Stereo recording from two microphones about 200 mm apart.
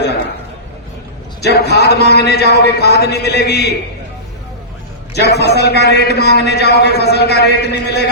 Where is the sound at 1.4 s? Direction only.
55° left (ahead or behind).